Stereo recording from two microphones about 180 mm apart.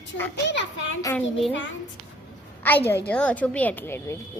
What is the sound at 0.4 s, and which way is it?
Speech, 85° left.